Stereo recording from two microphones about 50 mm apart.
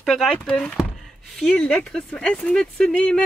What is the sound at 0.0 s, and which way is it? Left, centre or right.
Speech, centre.